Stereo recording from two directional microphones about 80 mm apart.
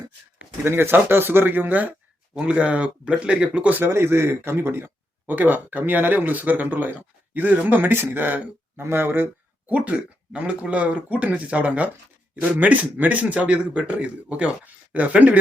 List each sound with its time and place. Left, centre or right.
0.6 s speech: right